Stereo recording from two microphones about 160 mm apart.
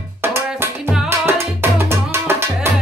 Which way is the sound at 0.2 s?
15° right (ahead or behind).